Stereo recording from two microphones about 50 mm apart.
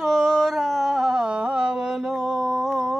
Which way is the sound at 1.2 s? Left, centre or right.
Right.